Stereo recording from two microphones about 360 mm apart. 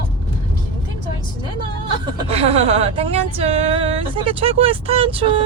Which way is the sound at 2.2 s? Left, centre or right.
Centre.